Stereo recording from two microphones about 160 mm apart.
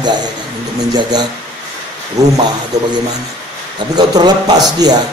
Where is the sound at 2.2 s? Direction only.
20° right (ahead or behind).